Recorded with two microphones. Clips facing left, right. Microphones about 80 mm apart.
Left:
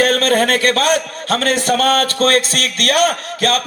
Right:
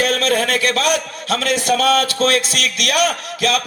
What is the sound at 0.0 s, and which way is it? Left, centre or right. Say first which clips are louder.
A man's voice: left 3 dB; left.